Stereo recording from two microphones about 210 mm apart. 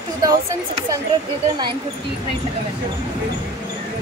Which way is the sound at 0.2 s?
15° right (ahead or behind).